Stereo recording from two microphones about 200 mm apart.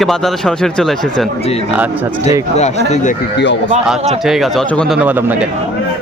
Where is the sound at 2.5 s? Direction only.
35° left (ahead or behind).